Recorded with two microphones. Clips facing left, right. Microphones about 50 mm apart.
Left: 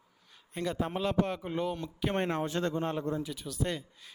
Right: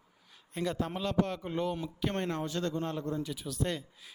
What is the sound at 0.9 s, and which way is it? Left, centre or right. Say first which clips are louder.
Speech: left 2 dB; centre.